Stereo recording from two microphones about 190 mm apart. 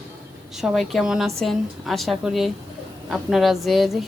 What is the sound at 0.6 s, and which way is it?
Speech, centre (ahead or behind).